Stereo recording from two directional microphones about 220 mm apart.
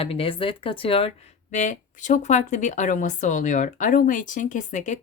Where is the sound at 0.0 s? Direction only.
25° left (ahead or behind).